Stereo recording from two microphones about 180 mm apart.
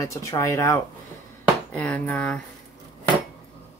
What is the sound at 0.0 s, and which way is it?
Speech, 15° left (ahead or behind).